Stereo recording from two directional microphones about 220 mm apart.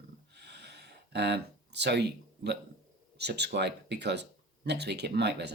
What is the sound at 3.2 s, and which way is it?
Speech, 50° right (ahead or behind).